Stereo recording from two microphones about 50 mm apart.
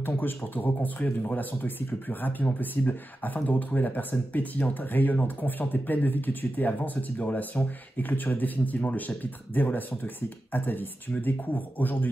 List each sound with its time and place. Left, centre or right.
0.0 s speech: left